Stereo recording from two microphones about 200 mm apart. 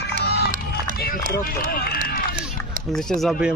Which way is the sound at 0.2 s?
55° left (ahead or behind).